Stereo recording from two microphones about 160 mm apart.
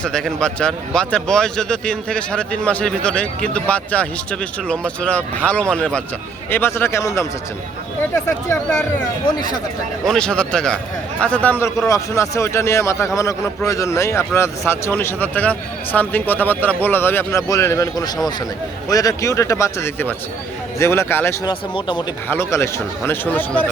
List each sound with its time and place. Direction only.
0.0 s speech: 5° left (ahead or behind)
10.1 s speech: 5° left (ahead or behind)
21.4 s speech: 30° left (ahead or behind)
22.3 s speech: 15° left (ahead or behind)